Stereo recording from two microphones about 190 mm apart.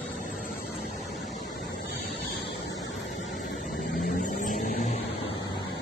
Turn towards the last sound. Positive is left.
turn(degrees=45)  # may be behind; listen again after turning